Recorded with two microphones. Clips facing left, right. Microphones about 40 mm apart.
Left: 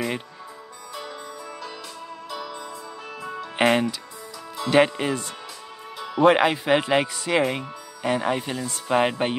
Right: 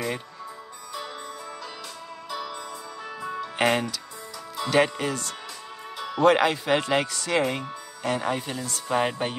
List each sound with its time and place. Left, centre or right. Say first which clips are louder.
2.3 s music: right 1 dB; centre
3.5 s speech: left 4 dB; centre
5.9 s speech: left 2 dB; centre